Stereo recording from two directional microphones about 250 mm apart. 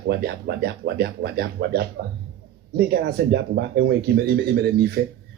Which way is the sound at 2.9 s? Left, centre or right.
Right.